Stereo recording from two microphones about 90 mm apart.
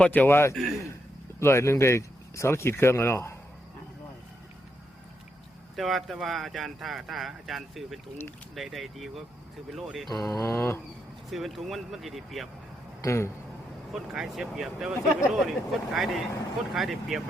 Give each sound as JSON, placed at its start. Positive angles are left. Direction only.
{"t": 0.0, "sound": "speech", "side_deg": 15}
{"t": 0.5, "sound": "speech", "side_deg": 0}
{"t": 1.4, "sound": "speech", "side_deg": 30}
{"t": 5.7, "sound": "speech", "side_deg": 0}
{"t": 10.1, "sound": "a sound", "side_deg": 40}
{"t": 11.3, "sound": "speech", "side_deg": 0}
{"t": 13.0, "sound": "a sound", "side_deg": 30}
{"t": 13.9, "sound": "speech", "side_deg": -5}